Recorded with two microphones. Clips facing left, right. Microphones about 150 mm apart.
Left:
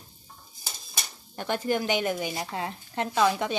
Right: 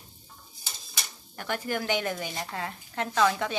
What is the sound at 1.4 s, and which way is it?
A woman's voice, 25° left (ahead or behind).